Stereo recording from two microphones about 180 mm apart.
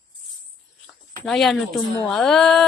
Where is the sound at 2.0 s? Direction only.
5° left (ahead or behind).